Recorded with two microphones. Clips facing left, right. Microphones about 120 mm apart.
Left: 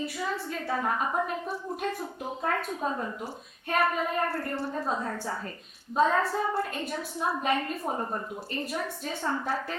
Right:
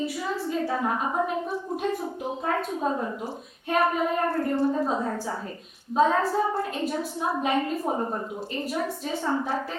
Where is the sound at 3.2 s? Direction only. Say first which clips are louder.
Right 4 dB; 20° right (ahead or behind).